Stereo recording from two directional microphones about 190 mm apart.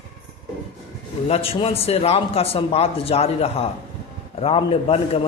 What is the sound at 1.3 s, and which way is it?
Speech, 30° left (ahead or behind).